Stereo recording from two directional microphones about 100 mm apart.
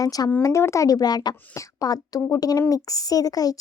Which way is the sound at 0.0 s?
40° left (ahead or behind).